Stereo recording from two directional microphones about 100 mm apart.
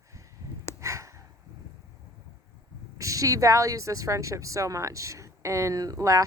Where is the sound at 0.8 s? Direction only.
30° right (ahead or behind).